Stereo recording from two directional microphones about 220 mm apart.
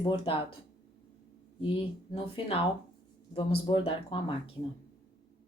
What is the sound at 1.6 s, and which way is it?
A woman's voice, 25° left (ahead or behind).